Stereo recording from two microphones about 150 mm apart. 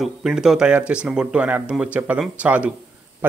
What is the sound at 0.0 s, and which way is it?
Speech, 5° right (ahead or behind).